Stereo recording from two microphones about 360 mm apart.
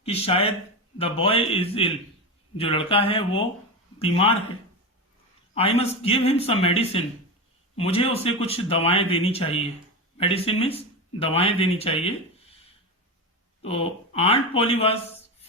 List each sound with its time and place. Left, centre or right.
0.0 s speech: centre
5.5 s speech: centre
13.7 s speech: centre